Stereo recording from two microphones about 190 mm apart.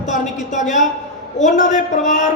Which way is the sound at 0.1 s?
40° left (ahead or behind).